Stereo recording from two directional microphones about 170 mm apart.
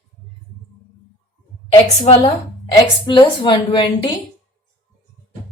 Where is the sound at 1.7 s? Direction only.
35° left (ahead or behind).